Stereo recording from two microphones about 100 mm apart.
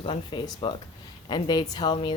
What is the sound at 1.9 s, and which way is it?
Speech, 55° left (ahead or behind).